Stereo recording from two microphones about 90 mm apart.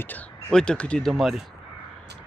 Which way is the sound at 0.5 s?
10° left (ahead or behind).